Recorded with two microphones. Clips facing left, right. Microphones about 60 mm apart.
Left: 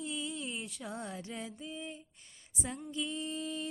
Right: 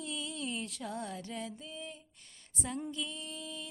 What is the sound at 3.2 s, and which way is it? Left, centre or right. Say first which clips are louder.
Mantra: left 6 dB; left.